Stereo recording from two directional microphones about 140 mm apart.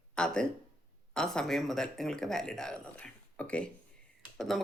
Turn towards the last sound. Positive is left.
turn(degrees=0)  # may be behind; listen again after turning